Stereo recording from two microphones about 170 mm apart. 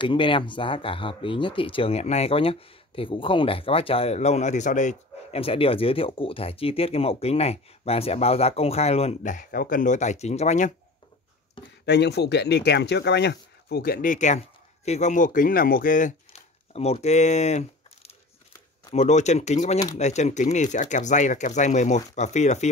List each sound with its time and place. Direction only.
0.0 s speech: 30° left (ahead or behind)
11.8 s speech: 80° left; by 22.7 s 45° left (ahead or behind)